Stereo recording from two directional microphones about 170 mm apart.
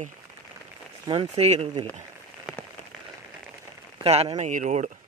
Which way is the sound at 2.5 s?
5° right (ahead or behind).